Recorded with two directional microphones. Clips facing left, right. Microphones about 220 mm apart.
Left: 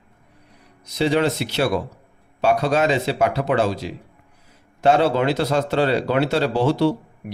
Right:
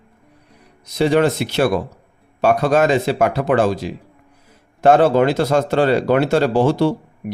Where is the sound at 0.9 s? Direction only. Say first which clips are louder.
Right 4 dB; 50° right (ahead or behind).